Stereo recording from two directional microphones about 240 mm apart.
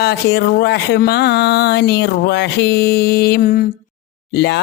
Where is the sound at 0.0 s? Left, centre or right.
Left.